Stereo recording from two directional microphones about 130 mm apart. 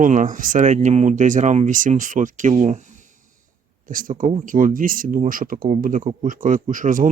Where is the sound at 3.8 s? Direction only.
90° right.